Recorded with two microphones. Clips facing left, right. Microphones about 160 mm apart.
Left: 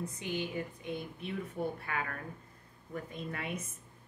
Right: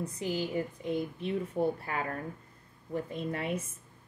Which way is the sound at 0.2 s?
35° right (ahead or behind).